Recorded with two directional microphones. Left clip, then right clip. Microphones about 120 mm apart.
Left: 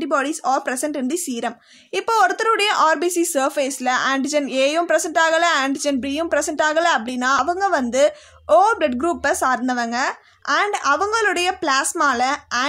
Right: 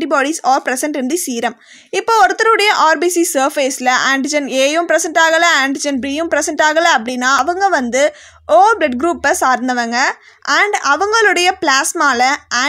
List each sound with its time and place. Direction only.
0.0 s speech: 30° right (ahead or behind)